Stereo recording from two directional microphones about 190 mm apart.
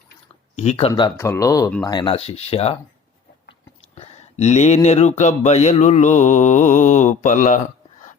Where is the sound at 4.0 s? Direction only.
35° left (ahead or behind).